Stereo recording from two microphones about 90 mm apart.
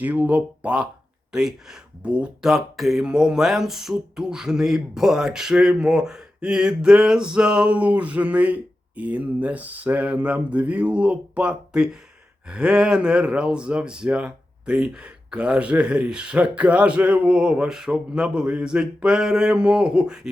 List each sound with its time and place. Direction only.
0.0 s speech: 15° right (ahead or behind)